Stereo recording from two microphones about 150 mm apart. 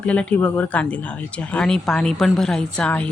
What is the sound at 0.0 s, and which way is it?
Speech, 10° left (ahead or behind).